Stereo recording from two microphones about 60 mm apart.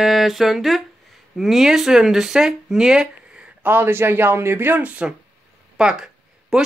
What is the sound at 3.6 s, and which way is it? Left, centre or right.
Speech, right.